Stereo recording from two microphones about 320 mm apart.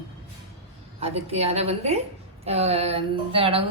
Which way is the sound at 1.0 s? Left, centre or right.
Centre.